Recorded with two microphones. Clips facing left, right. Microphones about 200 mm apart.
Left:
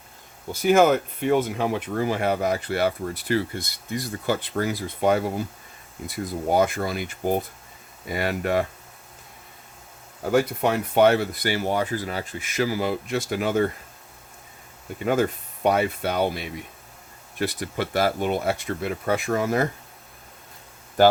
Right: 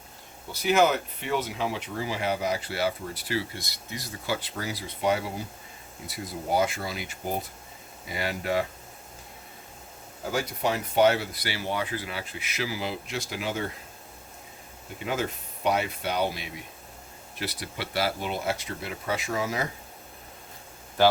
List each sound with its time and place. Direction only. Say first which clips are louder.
0.5 s speech: left 5 dB; 50° left (ahead or behind)
10.3 s speech: left 7 dB; 60° left (ahead or behind)
15.0 s speech: left 8 dB; 50° left (ahead or behind)